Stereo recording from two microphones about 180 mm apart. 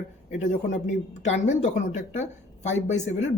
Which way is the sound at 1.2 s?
40° left (ahead or behind).